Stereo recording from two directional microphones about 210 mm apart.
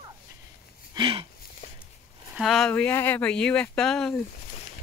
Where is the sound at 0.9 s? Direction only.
25° right (ahead or behind).